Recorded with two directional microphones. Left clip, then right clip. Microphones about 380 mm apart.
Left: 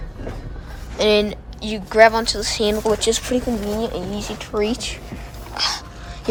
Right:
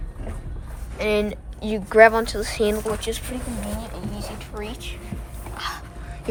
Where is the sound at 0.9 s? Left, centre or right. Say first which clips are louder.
Left 6 dB; centre.